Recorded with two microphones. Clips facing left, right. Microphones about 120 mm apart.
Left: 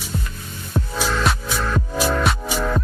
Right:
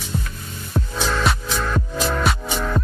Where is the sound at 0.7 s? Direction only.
5° left (ahead or behind).